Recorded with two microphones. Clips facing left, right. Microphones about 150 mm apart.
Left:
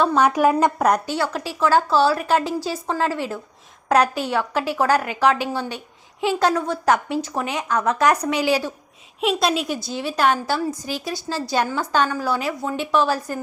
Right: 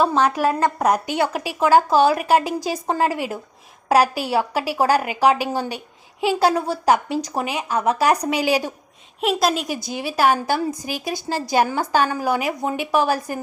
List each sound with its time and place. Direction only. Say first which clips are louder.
0.2 s a woman's voice: left 2 dB; 10° left (ahead or behind)
0.8 s a woman's voice: even; centre (ahead or behind)
1.0 s a woman's voice: right 2 dB; 15° right (ahead or behind)
6.5 s a woman's voice: even; 35° right (ahead or behind)
6.8 s a woman's voice: right 2 dB; 15° right (ahead or behind)
9.2 s a woman's voice: even; centre (ahead or behind)
9.8 s a woman's voice: right 3 dB; 10° right (ahead or behind)